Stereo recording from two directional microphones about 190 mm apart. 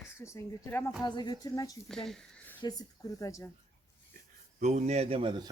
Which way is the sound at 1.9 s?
5° left (ahead or behind).